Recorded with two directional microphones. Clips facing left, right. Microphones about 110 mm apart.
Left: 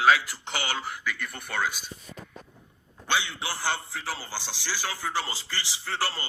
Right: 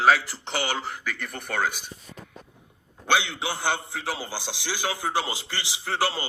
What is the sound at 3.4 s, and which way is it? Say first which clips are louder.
A man's voice: right 3 dB; 20° right (ahead or behind).